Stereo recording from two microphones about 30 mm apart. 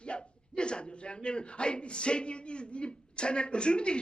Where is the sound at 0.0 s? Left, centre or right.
Left.